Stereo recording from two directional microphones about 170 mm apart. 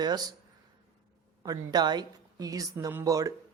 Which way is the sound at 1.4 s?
20° right (ahead or behind).